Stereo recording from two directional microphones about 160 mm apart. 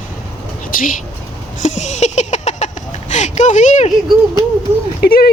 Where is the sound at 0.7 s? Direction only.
60° left (ahead or behind).